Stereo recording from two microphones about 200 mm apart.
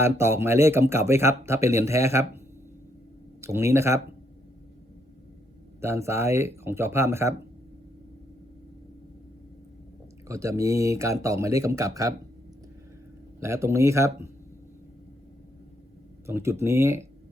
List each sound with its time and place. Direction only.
0.0 s speech: 10° right (ahead or behind)
3.4 s speech: 15° right (ahead or behind)
5.8 s speech: 15° right (ahead or behind)
10.2 s speech: 15° right (ahead or behind)
13.4 s speech: 15° right (ahead or behind)
16.2 s speech: 15° right (ahead or behind)